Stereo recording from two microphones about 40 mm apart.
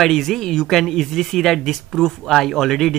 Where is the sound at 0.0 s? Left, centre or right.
Centre.